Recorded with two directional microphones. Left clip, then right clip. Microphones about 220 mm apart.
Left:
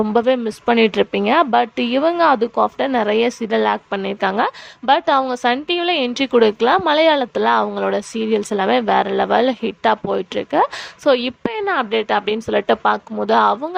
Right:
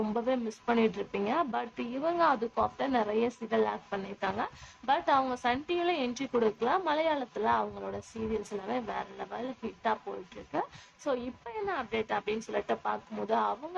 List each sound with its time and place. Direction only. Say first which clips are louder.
0.1 s a woman's voice: left 15 dB; 40° left (ahead or behind)